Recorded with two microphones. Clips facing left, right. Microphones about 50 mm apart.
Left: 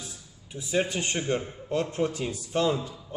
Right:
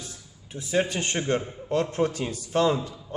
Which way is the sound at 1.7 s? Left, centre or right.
Right.